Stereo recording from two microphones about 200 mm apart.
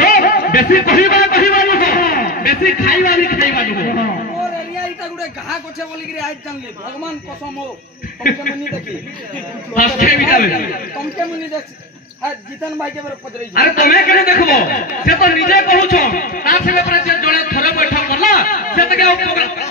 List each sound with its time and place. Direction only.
0.0 s a sound: 45° left (ahead or behind)
9.8 s a man's voice: 45° left (ahead or behind)
13.6 s a man's voice: 50° left (ahead or behind)